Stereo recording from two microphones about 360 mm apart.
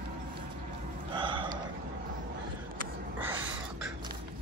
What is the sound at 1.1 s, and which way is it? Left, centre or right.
Gasp, centre.